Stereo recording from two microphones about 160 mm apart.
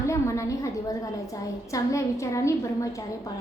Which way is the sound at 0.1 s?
20° left (ahead or behind).